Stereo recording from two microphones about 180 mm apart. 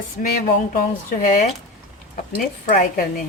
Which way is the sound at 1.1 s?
45° left (ahead or behind).